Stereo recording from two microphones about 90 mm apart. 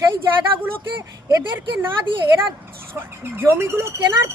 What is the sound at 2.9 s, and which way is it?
A woman's voice, 25° right (ahead or behind).